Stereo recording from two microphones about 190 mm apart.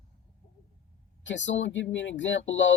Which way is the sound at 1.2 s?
75° left (ahead or behind).